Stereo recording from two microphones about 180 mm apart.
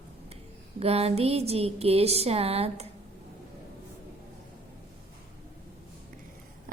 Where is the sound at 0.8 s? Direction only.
35° right (ahead or behind).